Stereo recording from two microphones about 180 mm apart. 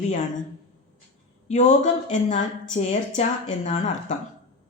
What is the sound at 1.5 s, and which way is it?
A woman's voice, 40° left (ahead or behind).